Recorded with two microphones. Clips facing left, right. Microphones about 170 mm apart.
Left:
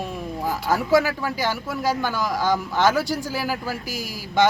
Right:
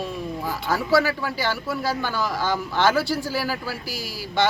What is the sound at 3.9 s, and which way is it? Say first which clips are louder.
Speech: left 2 dB; 45° left (ahead or behind).